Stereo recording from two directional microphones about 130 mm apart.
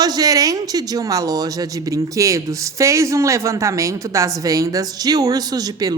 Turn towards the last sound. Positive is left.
turn(degrees=-30)  # may be behind; listen again after turning